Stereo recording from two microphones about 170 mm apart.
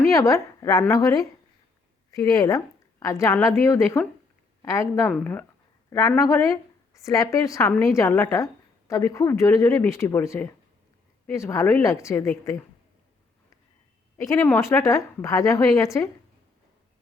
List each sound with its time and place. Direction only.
0.1 s a woman's voice: 20° left (ahead or behind)
14.2 s a woman's voice: 15° left (ahead or behind)